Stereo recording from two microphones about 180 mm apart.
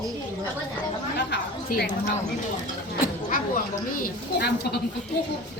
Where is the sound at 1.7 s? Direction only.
60° left (ahead or behind).